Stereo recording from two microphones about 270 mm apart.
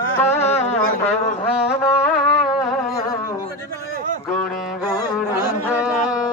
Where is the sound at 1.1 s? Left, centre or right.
Left.